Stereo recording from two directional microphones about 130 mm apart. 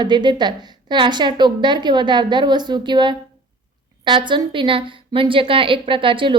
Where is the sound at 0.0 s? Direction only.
35° right (ahead or behind).